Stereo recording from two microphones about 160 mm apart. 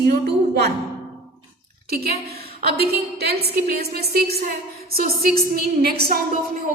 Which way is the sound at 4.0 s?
75° right (ahead or behind).